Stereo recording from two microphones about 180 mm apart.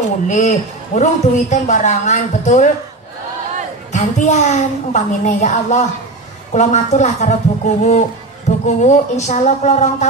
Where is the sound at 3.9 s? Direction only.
40° left (ahead or behind).